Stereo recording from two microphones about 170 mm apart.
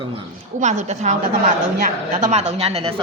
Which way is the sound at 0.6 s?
45° right (ahead or behind).